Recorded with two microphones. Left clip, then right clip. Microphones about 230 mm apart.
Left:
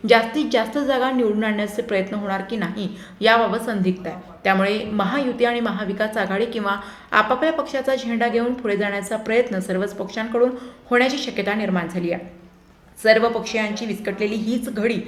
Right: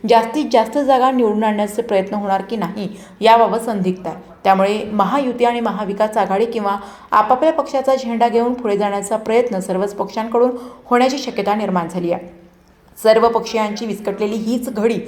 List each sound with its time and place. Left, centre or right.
0.0 s a woman's voice: centre